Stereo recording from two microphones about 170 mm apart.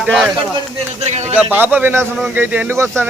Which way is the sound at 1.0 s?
40° right (ahead or behind).